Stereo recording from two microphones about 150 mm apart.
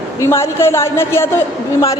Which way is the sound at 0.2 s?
20° left (ahead or behind).